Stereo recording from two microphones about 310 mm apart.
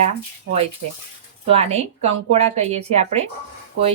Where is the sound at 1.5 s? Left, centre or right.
Centre.